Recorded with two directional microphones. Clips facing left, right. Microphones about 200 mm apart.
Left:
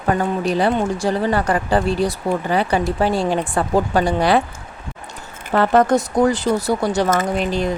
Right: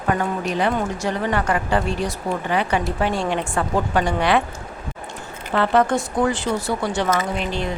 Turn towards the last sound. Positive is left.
turn(degrees=40)  # may be behind; listen again after turning